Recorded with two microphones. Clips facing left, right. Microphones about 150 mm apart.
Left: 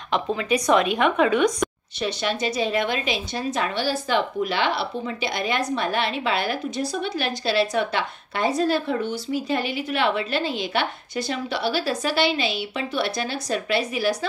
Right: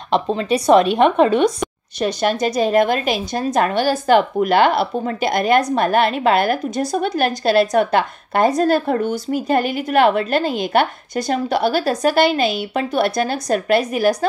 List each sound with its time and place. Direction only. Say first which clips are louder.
0.1 s a woman's voice: right 5 dB; 35° right (ahead or behind)
2.0 s a woman's voice: right 7 dB; 45° right (ahead or behind)